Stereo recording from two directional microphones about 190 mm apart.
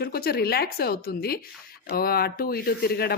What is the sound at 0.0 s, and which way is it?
Speech, 55° left (ahead or behind).